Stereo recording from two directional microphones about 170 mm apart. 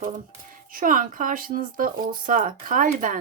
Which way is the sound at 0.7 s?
55° right (ahead or behind).